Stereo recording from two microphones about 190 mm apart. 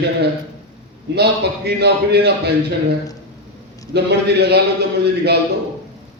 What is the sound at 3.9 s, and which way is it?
Speech, 60° right (ahead or behind).